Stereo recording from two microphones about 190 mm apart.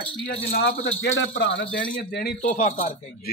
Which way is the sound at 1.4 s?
70° left (ahead or behind).